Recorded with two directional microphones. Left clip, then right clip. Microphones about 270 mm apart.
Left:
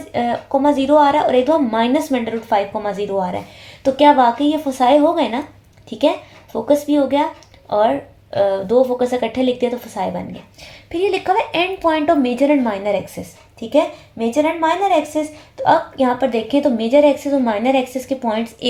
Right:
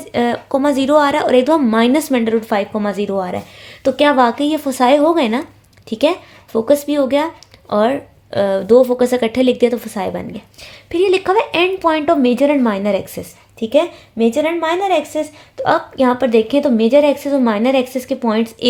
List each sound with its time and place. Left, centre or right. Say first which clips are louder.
0.1 s a woman's voice: right 1 dB; right